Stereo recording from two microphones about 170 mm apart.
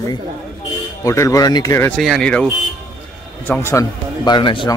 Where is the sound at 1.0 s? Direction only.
20° left (ahead or behind).